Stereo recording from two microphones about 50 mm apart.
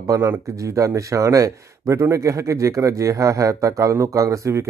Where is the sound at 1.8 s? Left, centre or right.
Right.